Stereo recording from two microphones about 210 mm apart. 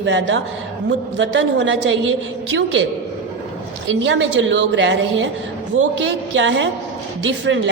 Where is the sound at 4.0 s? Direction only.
60° right (ahead or behind).